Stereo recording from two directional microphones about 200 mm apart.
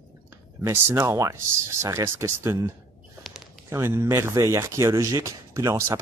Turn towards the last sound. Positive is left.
turn(degrees=-15)  # may be behind; listen again after turning